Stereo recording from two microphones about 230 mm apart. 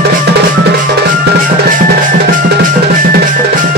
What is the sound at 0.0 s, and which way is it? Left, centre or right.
Drum, right.